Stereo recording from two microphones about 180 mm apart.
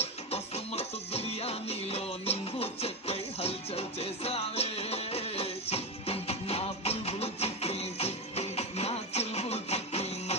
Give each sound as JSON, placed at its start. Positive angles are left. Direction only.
{"t": 0.0, "sound": "music", "side_deg": 35}